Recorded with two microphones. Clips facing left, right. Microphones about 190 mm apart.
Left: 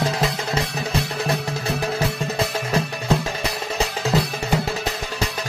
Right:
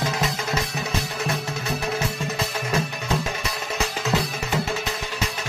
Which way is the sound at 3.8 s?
35° left (ahead or behind).